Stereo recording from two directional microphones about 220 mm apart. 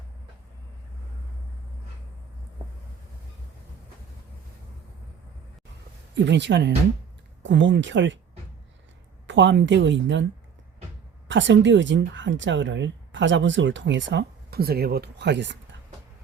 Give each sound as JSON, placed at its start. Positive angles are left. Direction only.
{"t": 6.1, "sound": "speech", "side_deg": -55}
{"t": 9.2, "sound": "speech", "side_deg": -55}
{"t": 11.3, "sound": "speech", "side_deg": -55}